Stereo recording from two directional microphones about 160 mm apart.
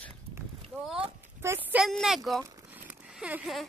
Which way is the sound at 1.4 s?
15° right (ahead or behind).